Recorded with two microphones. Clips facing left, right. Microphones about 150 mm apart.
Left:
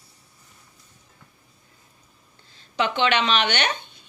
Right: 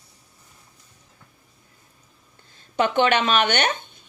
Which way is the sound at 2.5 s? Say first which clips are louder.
Right 3 dB; 50° right (ahead or behind).